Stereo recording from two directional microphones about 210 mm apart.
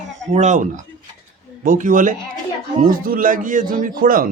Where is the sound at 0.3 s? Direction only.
35° right (ahead or behind).